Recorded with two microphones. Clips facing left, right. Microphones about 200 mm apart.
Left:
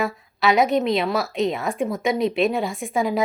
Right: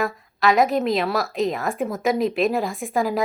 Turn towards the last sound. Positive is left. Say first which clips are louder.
# even
turn(degrees=0)  # may be behind; listen again after turning